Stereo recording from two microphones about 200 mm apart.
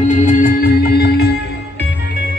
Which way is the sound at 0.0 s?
40° left (ahead or behind).